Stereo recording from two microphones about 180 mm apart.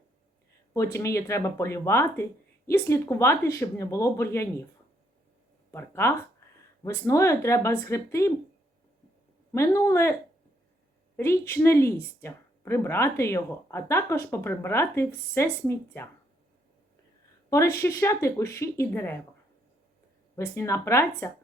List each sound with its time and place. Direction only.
0.7 s speech: 15° left (ahead or behind)
5.7 s speech: 15° left (ahead or behind)
9.5 s speech: 15° left (ahead or behind)
11.2 s speech: 15° left (ahead or behind)
17.5 s speech: 15° left (ahead or behind)
20.3 s speech: 15° left (ahead or behind)